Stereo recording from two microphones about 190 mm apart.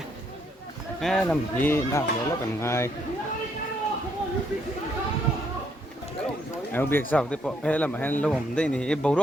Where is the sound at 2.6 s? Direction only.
15° left (ahead or behind).